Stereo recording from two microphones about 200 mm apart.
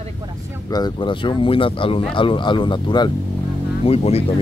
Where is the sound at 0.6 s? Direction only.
20° left (ahead or behind).